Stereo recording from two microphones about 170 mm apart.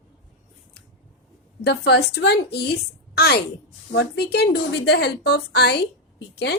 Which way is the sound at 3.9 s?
80° left.